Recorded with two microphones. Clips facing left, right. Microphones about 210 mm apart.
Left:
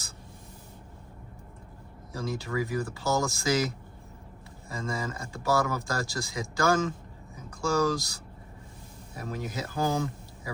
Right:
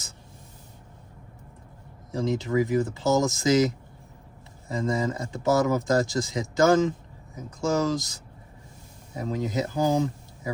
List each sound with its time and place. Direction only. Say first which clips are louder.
2.1 s speech: right 7 dB; 20° right (ahead or behind)